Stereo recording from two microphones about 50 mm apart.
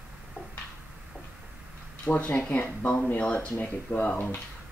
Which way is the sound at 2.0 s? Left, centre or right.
Left.